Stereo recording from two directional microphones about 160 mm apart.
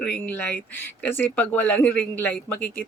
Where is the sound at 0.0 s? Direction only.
10° left (ahead or behind).